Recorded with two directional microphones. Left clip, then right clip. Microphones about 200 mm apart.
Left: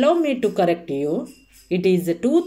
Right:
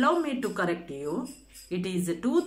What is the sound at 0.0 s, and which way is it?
A woman's voice, 15° left (ahead or behind).